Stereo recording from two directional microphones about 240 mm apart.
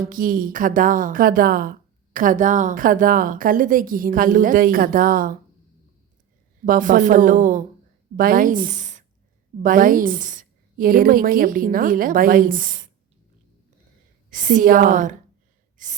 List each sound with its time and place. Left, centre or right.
0.1 s a woman's voice: right
6.7 s a woman's voice: right
14.3 s a woman's voice: right